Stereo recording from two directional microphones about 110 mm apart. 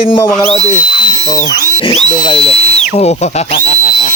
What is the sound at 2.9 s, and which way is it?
Speech, 85° left.